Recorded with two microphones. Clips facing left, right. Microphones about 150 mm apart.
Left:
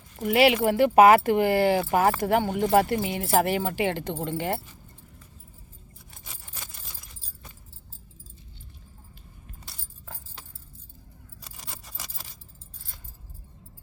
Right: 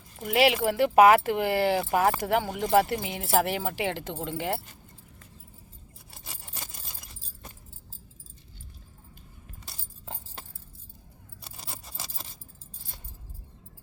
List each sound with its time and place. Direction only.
0.2 s speech: centre (ahead or behind)
6.2 s a sound: 30° right (ahead or behind)
11.5 s keys jangling: 30° right (ahead or behind)